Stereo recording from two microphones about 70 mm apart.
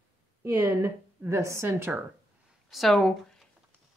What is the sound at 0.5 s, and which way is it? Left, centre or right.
A woman's voice, right.